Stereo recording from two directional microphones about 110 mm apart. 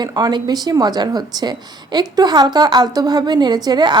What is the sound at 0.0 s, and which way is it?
A woman's voice, 40° right (ahead or behind).